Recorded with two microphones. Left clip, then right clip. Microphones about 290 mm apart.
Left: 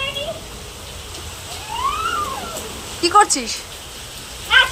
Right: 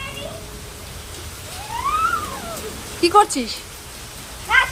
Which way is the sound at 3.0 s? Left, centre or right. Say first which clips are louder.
Left 1 dB; right.